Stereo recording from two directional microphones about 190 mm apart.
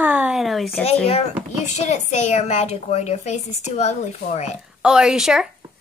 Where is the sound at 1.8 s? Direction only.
35° left (ahead or behind).